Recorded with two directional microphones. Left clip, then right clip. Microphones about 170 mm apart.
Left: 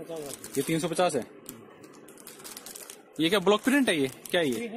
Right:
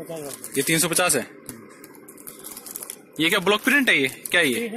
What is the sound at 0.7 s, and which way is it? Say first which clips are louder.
Speech: right 5 dB; 5° left (ahead or behind).